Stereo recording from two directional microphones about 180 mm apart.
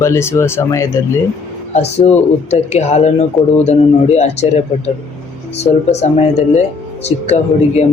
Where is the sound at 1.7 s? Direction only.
35° left (ahead or behind).